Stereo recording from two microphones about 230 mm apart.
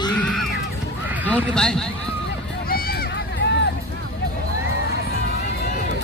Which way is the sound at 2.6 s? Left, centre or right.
Left.